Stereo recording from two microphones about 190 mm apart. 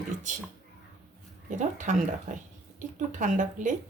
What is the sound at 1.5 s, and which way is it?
Speech, 40° right (ahead or behind).